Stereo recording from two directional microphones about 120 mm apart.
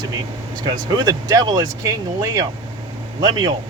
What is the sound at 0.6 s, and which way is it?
Speech, 35° right (ahead or behind).